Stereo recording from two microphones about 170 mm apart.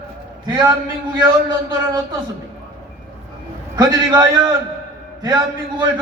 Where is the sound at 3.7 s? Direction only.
25° right (ahead or behind).